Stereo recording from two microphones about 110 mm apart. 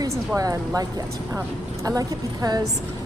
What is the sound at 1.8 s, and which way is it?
Speech, 35° right (ahead or behind).